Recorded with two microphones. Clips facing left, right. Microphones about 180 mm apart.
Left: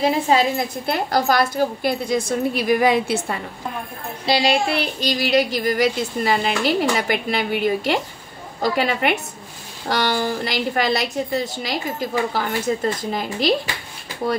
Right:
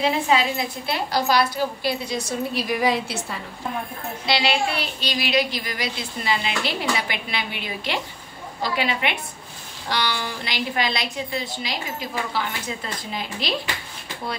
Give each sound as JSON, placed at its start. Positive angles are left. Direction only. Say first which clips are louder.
{"t": 0.0, "sound": "speech", "louder": "left 3 dB", "side_deg": 45}
{"t": 4.3, "sound": "speech", "louder": "left 4 dB", "side_deg": 35}